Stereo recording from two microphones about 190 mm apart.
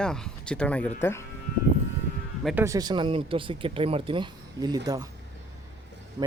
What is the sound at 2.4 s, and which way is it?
Speech, 10° right (ahead or behind).